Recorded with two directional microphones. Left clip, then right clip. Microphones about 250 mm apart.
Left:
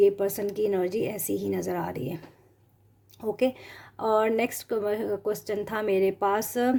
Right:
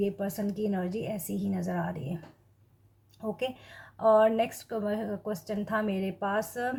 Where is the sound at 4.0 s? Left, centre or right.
Left.